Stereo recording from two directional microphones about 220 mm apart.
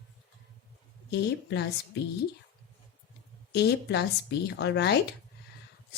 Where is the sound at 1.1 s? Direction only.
50° left (ahead or behind).